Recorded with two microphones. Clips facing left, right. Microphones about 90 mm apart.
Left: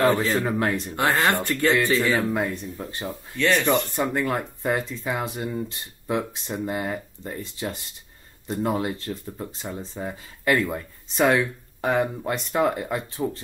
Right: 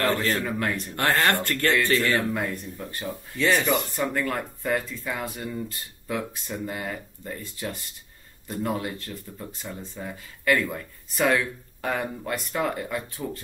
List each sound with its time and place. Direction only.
0.0 s speech: 10° left (ahead or behind)
0.4 s speech: 30° left (ahead or behind)
0.9 s speech: 10° left (ahead or behind)
2.3 s speech: 25° left (ahead or behind)
3.3 s speech: 10° right (ahead or behind)
3.9 s speech: 20° left (ahead or behind)